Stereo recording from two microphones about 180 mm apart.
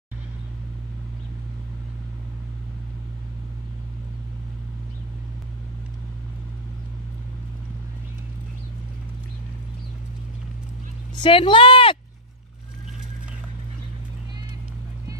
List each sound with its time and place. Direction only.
11.1 s speech: 25° left (ahead or behind)